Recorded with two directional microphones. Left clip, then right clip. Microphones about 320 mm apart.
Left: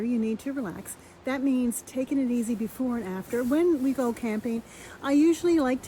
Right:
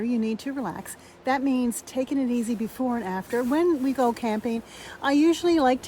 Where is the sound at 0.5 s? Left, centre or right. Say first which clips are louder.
Right 2 dB; right.